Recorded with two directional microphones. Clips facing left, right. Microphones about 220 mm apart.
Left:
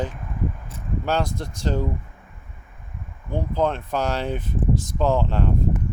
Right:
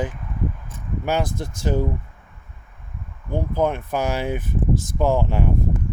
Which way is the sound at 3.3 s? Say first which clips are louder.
Right 1 dB; 10° right (ahead or behind).